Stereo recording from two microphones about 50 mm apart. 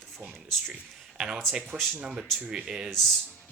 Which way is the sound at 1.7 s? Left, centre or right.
Centre.